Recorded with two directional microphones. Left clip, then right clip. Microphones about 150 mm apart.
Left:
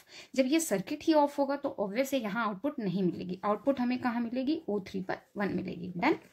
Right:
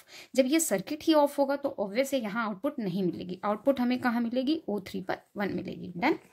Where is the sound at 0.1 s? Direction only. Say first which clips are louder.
Right 3 dB; 30° right (ahead or behind).